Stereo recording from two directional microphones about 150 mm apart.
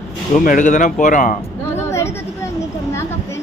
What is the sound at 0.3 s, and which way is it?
Speech, 60° left (ahead or behind).